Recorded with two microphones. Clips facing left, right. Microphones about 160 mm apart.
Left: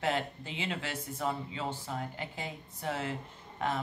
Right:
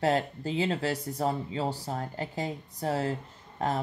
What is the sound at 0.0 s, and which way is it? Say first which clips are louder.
Speech: right 6 dB; 40° right (ahead or behind).